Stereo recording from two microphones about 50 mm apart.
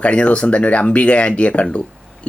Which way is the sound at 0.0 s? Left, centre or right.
Left.